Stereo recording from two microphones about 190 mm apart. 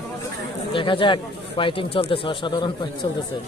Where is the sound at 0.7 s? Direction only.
25° left (ahead or behind).